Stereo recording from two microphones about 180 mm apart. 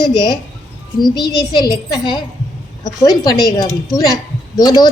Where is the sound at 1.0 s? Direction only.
20° left (ahead or behind).